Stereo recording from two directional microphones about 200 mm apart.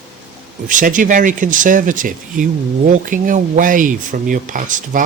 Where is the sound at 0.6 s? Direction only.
40° right (ahead or behind).